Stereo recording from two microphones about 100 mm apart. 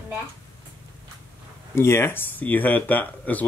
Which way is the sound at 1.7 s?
25° left (ahead or behind).